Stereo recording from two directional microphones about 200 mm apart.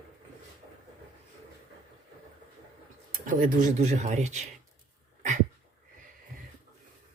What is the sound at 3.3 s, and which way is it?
Speech, 40° right (ahead or behind).